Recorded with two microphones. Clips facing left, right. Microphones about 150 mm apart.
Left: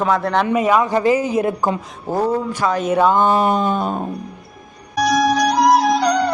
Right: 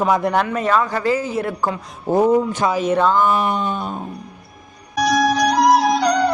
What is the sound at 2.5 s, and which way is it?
Speech, 20° right (ahead or behind).